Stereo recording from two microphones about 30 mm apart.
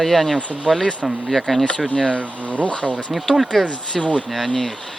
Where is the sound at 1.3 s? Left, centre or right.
Centre.